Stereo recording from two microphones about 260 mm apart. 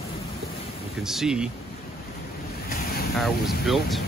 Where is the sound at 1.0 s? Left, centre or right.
Centre.